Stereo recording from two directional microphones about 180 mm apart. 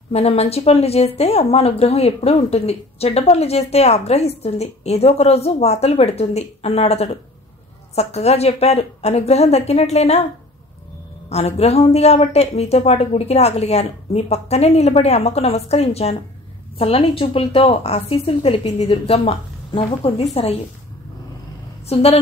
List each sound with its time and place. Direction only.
0.1 s speech: 35° left (ahead or behind)
11.2 s speech: 35° left (ahead or behind)
21.8 s speech: 35° left (ahead or behind)